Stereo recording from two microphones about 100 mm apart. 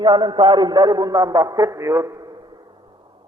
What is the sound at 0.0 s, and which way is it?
A man's voice, 50° right (ahead or behind).